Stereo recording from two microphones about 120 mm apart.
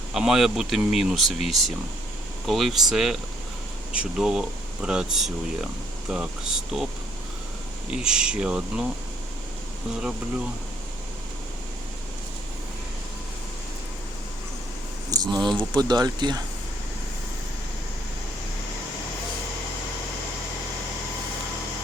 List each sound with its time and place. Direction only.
0.1 s speech: 5° right (ahead or behind)
7.9 s speech: 5° right (ahead or behind)
9.9 s speech: 5° right (ahead or behind)
15.1 s speech: 35° right (ahead or behind)